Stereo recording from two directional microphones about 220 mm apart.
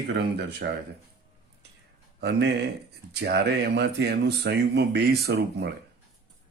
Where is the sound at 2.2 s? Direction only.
50° right (ahead or behind).